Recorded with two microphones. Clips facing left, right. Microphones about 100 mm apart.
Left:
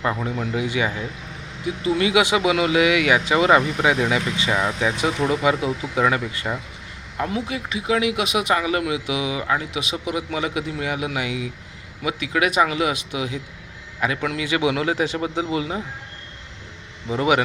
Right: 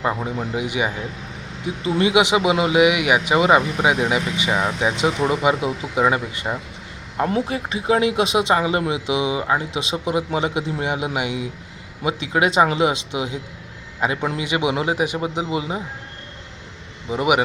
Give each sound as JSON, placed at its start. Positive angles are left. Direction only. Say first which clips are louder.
{"t": 0.0, "sound": "speech", "louder": "right 1 dB", "side_deg": -20}
{"t": 7.2, "sound": "speech", "louder": "right 4 dB", "side_deg": -40}
{"t": 17.1, "sound": "speech", "louder": "right 1 dB", "side_deg": -15}